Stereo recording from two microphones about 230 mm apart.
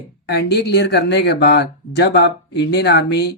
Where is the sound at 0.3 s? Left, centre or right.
Left.